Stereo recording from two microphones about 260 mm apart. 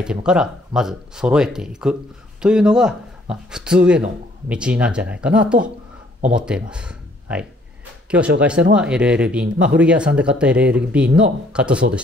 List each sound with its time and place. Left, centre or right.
0.0 s speech: centre